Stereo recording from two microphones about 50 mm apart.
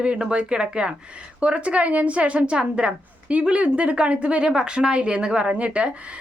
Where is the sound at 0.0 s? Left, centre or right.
Centre.